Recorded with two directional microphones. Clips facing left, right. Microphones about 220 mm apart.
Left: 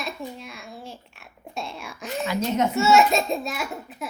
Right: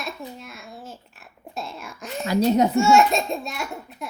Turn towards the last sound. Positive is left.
turn(degrees=0)  # may be behind; listen again after turning